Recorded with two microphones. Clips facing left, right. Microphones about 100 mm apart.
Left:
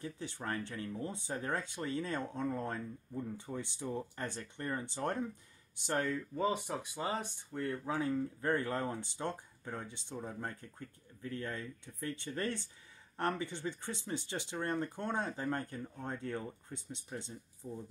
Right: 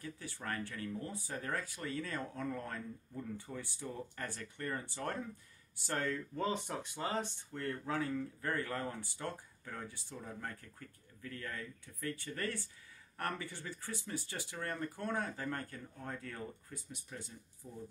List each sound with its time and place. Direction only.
0.0 s speech: 20° left (ahead or behind)